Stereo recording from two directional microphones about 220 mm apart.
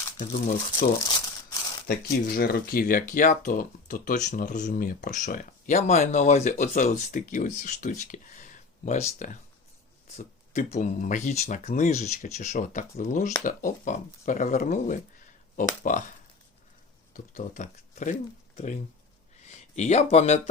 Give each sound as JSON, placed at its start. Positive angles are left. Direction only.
{"t": 0.2, "sound": "speech", "side_deg": 35}
{"t": 0.9, "sound": "crumpling", "side_deg": 15}
{"t": 1.9, "sound": "speech", "side_deg": 40}
{"t": 17.3, "sound": "speech", "side_deg": 35}